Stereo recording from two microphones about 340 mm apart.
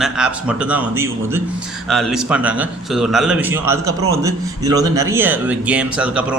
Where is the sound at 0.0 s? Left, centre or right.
Centre.